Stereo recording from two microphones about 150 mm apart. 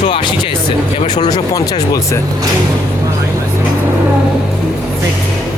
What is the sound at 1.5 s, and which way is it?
Speech, 25° left (ahead or behind).